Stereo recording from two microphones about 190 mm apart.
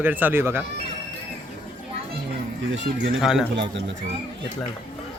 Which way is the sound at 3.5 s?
75° right (ahead or behind).